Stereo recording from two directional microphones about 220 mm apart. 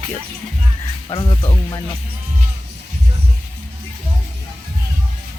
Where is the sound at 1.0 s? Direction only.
20° left (ahead or behind).